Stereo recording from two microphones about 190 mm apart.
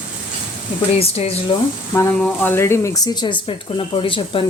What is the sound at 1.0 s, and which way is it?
Speech, 30° left (ahead or behind).